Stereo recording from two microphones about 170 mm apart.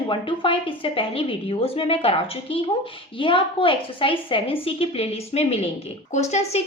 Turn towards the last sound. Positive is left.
turn(degrees=40)  # may be behind; listen again after turning